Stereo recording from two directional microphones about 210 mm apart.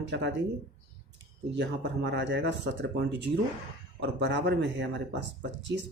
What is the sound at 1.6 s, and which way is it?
Speech, 55° right (ahead or behind).